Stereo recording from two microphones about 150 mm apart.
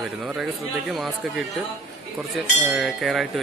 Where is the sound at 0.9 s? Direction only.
Centre (ahead or behind).